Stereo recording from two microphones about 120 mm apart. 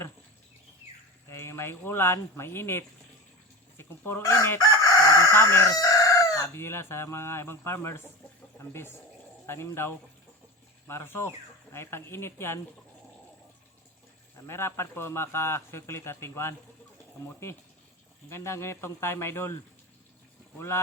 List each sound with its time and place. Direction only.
1.3 s speech: 20° left (ahead or behind)
3.8 s chicken: 20° left (ahead or behind)
8.5 s speech: 20° left (ahead or behind)
14.3 s speech: 20° left (ahead or behind)
18.3 s speech: 20° left (ahead or behind)
20.6 s speech: 20° left (ahead or behind)